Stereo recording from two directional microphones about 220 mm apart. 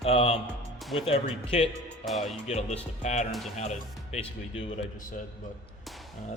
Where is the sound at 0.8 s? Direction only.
Centre (ahead or behind).